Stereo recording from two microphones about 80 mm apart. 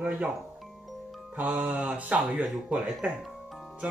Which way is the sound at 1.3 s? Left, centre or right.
Centre.